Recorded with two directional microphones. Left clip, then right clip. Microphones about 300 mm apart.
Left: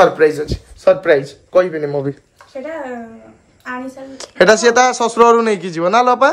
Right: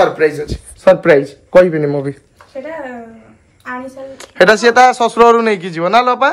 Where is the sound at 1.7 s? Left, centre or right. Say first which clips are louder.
Right 3 dB; centre.